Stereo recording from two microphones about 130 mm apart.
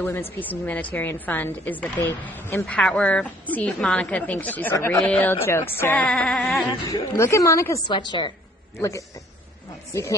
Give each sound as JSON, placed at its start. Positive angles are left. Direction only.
{"t": 0.0, "sound": "a woman's voice", "side_deg": 15}
{"t": 2.6, "sound": "a woman's voice", "side_deg": 5}
{"t": 6.9, "sound": "a woman's voice", "side_deg": 25}
{"t": 7.8, "sound": "a woman's voice", "side_deg": 35}